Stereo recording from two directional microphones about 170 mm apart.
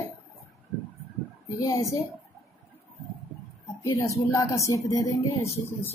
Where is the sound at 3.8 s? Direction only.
15° left (ahead or behind).